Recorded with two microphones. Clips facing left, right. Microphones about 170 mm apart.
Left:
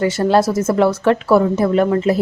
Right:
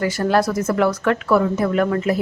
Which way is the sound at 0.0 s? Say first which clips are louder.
Left 4 dB; 25° left (ahead or behind).